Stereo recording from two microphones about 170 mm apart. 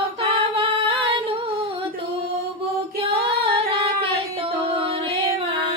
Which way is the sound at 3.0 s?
30° right (ahead or behind).